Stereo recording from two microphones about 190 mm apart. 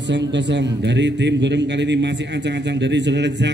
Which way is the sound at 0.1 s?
65° right (ahead or behind).